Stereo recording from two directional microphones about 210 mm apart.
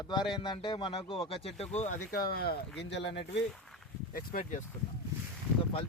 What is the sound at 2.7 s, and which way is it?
Speech, 55° left (ahead or behind).